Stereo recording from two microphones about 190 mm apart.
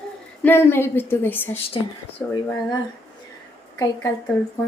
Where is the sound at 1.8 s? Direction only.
25° left (ahead or behind).